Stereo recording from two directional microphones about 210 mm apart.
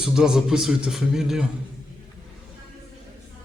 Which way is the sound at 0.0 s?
5° right (ahead or behind).